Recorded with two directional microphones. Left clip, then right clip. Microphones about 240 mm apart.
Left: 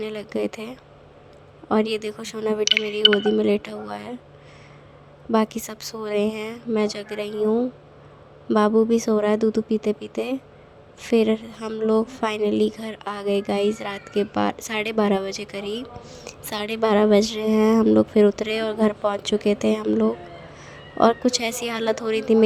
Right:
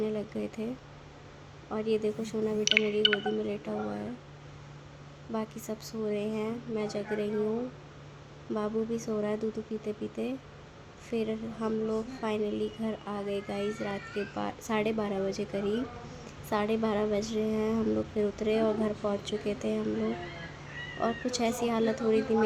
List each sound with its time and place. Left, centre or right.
0.0 s a woman's voice: left
1.7 s a woman's voice: left
3.0 s speech: centre
3.3 s a woman's voice: left
5.3 s a woman's voice: left
8.5 s a woman's voice: left
21.0 s a woman's voice: left